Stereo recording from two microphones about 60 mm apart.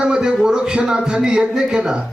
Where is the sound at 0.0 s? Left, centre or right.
Centre.